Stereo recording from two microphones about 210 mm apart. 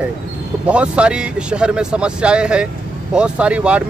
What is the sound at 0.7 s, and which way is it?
Speech, 5° right (ahead or behind).